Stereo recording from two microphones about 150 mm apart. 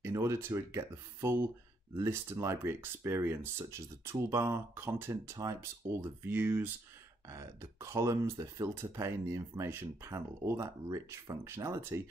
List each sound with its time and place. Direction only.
0.0 s speech: 20° right (ahead or behind)